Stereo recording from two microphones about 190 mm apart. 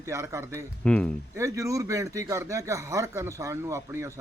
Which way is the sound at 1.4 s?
15° right (ahead or behind).